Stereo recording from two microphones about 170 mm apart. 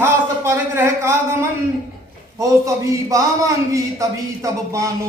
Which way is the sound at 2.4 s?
20° right (ahead or behind).